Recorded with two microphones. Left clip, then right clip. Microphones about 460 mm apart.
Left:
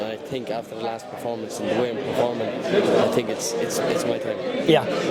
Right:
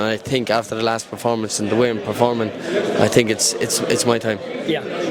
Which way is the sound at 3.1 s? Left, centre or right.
Right.